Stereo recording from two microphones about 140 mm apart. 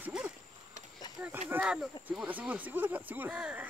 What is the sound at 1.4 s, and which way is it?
Speech, 10° right (ahead or behind).